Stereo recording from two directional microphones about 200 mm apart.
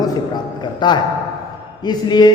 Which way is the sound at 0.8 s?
20° left (ahead or behind).